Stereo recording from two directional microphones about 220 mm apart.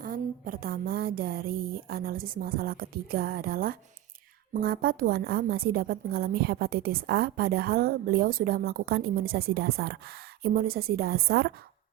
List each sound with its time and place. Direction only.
0.0 s a woman's voice: 40° right (ahead or behind)